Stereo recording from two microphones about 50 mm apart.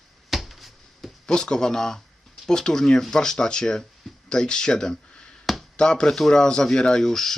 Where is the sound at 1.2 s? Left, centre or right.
Centre.